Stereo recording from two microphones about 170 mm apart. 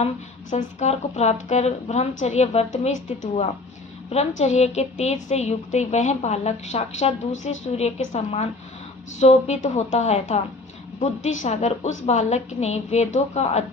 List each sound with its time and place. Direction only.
0.5 s a woman's voice: 40° left (ahead or behind)